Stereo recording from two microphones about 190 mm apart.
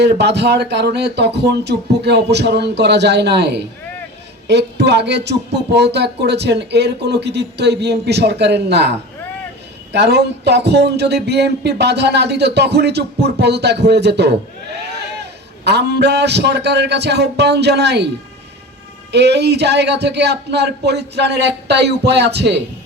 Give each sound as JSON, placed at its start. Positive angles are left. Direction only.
{"t": 0.0, "sound": "speech", "side_deg": -60}
{"t": 15.6, "sound": "speech", "side_deg": -60}
{"t": 19.1, "sound": "speech", "side_deg": -60}